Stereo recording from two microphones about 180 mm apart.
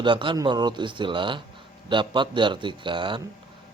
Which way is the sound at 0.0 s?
25° right (ahead or behind).